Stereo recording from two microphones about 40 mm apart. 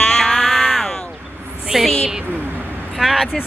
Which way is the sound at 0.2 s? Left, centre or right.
Centre.